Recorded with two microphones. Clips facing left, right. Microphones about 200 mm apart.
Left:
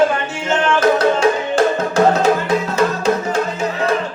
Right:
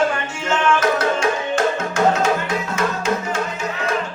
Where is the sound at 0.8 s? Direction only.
35° left (ahead or behind).